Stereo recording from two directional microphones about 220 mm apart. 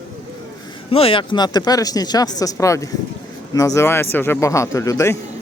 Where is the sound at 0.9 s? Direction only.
25° left (ahead or behind).